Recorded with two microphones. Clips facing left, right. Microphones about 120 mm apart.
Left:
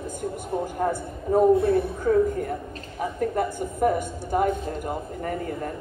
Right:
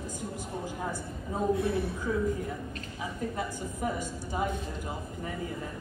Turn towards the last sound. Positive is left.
turn(degrees=55)  # may be behind; listen again after turning